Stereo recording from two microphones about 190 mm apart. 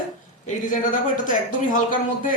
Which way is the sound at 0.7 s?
45° left (ahead or behind).